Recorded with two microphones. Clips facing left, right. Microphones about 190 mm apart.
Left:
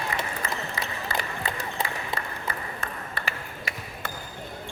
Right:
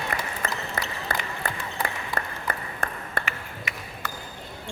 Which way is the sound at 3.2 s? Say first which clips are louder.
Right 4 dB; 50° right (ahead or behind).